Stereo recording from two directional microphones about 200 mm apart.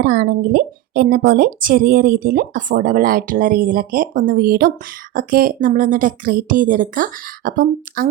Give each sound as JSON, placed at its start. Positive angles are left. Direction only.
{"t": 0.0, "sound": "a woman's voice", "side_deg": -50}